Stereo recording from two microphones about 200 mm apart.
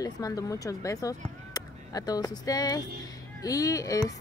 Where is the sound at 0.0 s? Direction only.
15° left (ahead or behind).